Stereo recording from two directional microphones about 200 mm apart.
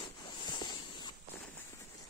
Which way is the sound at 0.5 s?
20° left (ahead or behind).